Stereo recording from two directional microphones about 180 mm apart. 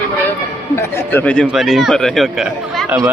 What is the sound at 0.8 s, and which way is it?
Speech, 10° left (ahead or behind).